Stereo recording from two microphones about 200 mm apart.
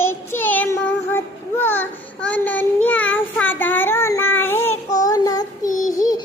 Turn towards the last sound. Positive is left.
turn(degrees=20)  # may be behind; listen again after turning